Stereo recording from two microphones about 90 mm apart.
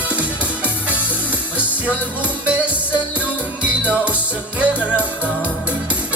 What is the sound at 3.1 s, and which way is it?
Music, 15° right (ahead or behind).